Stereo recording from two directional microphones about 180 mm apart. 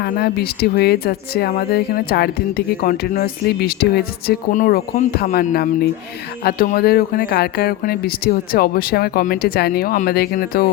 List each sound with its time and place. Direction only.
0.0 s speech: 60° left (ahead or behind)